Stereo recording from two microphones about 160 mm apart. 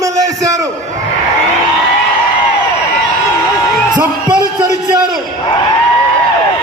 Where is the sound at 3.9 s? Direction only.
25° right (ahead or behind).